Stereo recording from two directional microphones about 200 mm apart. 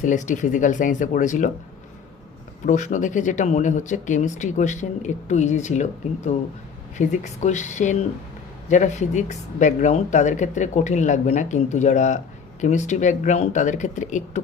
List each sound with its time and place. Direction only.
0.0 s speech: 40° left (ahead or behind)
2.6 s speech: 40° left (ahead or behind)